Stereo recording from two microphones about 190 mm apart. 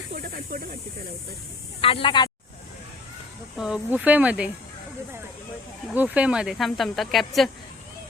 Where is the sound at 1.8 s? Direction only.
30° left (ahead or behind).